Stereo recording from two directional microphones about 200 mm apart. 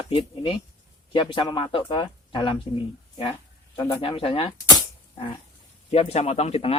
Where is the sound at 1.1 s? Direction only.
25° left (ahead or behind).